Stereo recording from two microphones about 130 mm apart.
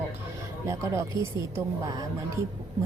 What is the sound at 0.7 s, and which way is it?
A woman's voice, 25° right (ahead or behind).